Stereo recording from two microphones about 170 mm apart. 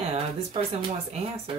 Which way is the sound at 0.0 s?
35° right (ahead or behind).